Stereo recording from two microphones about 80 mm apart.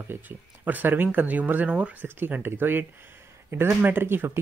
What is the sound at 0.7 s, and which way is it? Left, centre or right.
Speech, right.